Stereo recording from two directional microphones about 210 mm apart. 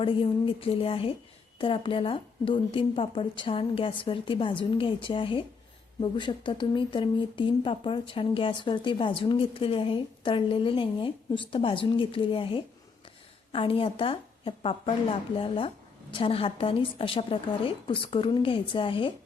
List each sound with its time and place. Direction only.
0.0 s speech: 25° left (ahead or behind)